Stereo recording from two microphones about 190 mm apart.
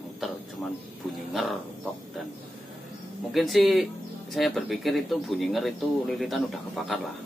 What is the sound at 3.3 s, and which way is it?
Speech, centre (ahead or behind).